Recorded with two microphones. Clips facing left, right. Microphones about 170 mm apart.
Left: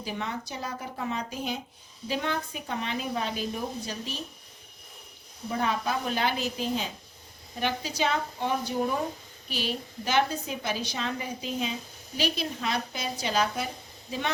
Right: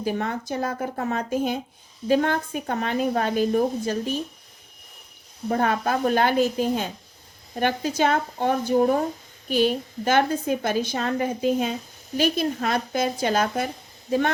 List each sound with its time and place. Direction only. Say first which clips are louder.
0.0 s a woman's voice: right 8 dB; 50° right (ahead or behind)
5.5 s a woman's voice: right 6 dB; 55° right (ahead or behind)